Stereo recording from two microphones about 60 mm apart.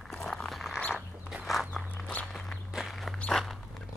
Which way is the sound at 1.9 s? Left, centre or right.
Left.